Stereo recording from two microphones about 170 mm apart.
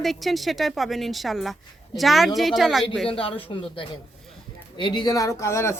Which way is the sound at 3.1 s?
30° left (ahead or behind).